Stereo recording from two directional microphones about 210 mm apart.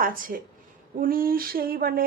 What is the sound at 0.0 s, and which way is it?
A woman's voice, 40° right (ahead or behind).